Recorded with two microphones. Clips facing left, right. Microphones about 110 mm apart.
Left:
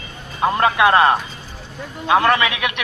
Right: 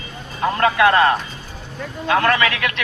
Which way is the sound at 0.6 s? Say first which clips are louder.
Even; 20° left (ahead or behind).